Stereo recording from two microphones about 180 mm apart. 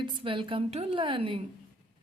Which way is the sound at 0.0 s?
30° right (ahead or behind).